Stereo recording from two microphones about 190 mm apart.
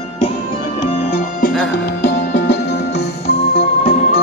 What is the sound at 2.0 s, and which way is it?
Music, 60° left (ahead or behind).